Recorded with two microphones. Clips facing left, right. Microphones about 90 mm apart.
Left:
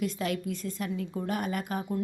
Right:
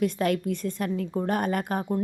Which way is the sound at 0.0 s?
50° right (ahead or behind).